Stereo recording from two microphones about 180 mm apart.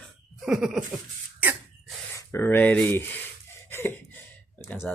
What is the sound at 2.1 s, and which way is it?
Speech, 15° left (ahead or behind).